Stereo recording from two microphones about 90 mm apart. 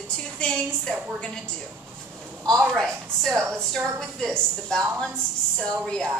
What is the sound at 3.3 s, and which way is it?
Speech, 30° right (ahead or behind).